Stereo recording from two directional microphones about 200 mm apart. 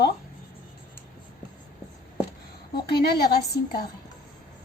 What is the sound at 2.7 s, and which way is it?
Speech, 50° left (ahead or behind).